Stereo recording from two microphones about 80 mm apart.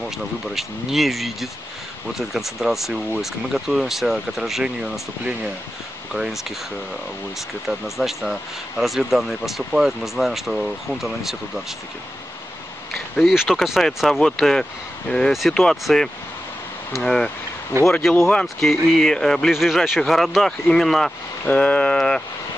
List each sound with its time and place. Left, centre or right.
0.6 s speech: centre
6.1 s speech: centre
7.6 s speech: centre
13.1 s speech: centre
17.7 s speech: right
18.3 s speech: centre
21.5 s speech: centre